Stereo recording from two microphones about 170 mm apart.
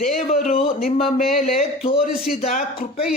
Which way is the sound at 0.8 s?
60° left (ahead or behind).